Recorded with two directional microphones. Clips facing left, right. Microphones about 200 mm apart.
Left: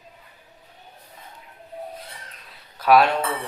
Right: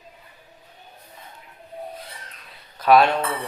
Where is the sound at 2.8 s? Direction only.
5° left (ahead or behind).